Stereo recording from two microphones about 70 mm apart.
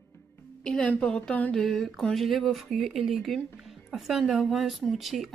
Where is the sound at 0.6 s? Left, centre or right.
Centre.